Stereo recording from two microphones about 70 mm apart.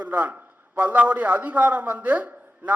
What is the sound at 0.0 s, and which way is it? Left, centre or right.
A man's voice, right.